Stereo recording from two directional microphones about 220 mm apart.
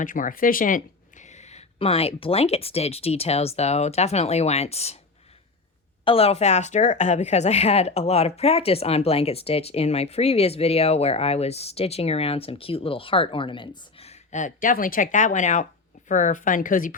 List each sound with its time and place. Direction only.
0.0 s speech: 40° left (ahead or behind)
6.1 s speech: 25° left (ahead or behind)